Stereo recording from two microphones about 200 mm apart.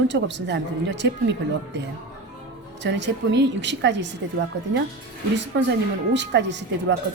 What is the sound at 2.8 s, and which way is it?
Speech, 65° right (ahead or behind).